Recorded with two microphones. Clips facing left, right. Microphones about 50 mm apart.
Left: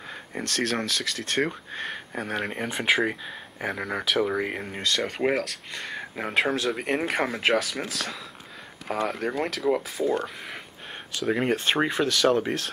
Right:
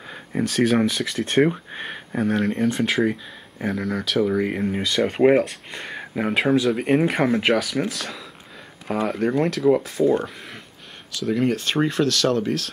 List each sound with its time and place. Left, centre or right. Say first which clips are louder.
0.1 s speech: right 7 dB; centre
2.1 s speech: right 9 dB; centre
2.5 s speech: right 3 dB; centre
4.8 s speech: right 7 dB; centre
11.1 s speech: right 3 dB; left